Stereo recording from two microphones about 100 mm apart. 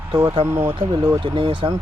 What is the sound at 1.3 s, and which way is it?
Speech, 60° right (ahead or behind).